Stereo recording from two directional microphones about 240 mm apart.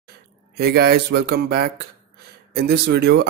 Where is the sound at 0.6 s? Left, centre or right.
Right.